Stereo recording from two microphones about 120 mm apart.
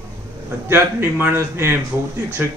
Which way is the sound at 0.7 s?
20° right (ahead or behind).